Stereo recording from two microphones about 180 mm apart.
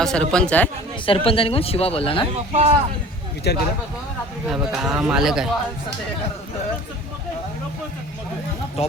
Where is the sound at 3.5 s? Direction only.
65° left (ahead or behind).